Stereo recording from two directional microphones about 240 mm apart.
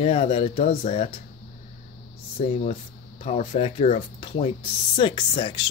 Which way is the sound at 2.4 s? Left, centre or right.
Left.